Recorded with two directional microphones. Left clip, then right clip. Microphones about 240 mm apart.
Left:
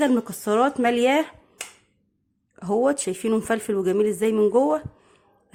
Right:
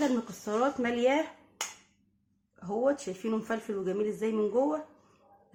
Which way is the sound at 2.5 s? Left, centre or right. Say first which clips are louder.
Left 8 dB; left.